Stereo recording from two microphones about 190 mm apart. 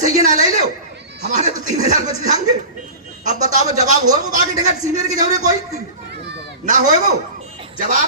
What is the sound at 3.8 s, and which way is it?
A man's voice, 40° right (ahead or behind).